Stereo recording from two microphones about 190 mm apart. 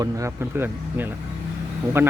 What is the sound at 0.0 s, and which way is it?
Speech, 15° right (ahead or behind).